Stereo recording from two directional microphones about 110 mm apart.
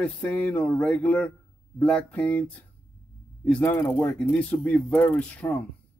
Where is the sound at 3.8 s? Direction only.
20° left (ahead or behind).